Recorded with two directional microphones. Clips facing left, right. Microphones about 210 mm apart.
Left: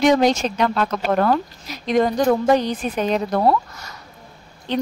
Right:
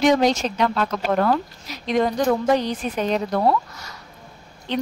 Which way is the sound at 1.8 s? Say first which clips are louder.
Left 2 dB; 45° left (ahead or behind).